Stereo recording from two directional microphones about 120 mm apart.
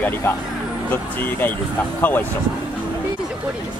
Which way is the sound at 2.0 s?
15° left (ahead or behind).